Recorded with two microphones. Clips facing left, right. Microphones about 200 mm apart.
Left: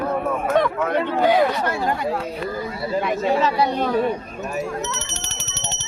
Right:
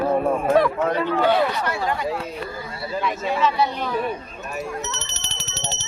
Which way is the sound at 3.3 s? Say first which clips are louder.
Left 1 dB; 35° left (ahead or behind).